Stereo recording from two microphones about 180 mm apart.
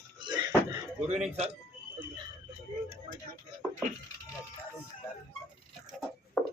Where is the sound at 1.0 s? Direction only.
40° right (ahead or behind).